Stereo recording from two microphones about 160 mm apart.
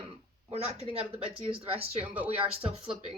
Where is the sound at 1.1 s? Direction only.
35° right (ahead or behind).